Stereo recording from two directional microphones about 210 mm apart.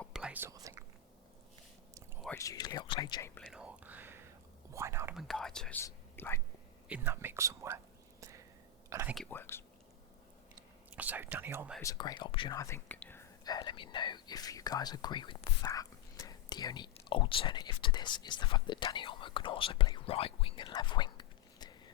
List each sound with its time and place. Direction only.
0.0 s whispering: 5° right (ahead or behind)
2.4 s speech: 15° left (ahead or behind)
3.5 s whispering: 5° right (ahead or behind)
4.7 s speech: 15° right (ahead or behind)
5.1 s speech: centre (ahead or behind)
6.8 s speech: 10° right (ahead or behind)
8.2 s whispering: 15° right (ahead or behind)
8.9 s speech: 10° right (ahead or behind)
9.1 s speech: 5° left (ahead or behind)
10.9 s speech: 10° right (ahead or behind)
11.8 s speech: 15° left (ahead or behind)